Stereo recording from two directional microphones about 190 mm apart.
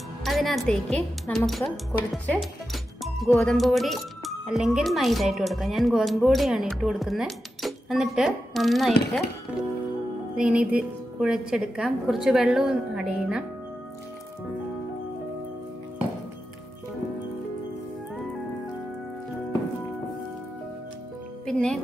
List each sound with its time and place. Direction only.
0.2 s a woman's voice: centre (ahead or behind)
10.3 s speech: 5° right (ahead or behind)
21.5 s speech: 5° left (ahead or behind)